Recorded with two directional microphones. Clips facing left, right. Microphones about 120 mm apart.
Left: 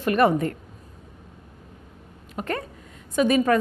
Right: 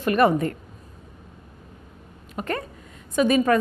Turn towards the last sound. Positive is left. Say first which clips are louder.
# right 1 dB
turn(degrees=-20)  # may be behind; listen again after turning